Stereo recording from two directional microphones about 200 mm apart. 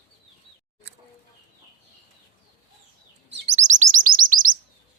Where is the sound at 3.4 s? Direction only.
35° right (ahead or behind).